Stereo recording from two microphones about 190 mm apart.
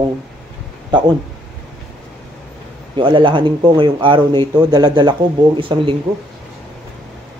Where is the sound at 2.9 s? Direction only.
25° right (ahead or behind).